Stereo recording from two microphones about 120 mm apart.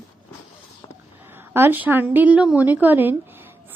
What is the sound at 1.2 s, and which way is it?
A woman's voice, 15° right (ahead or behind).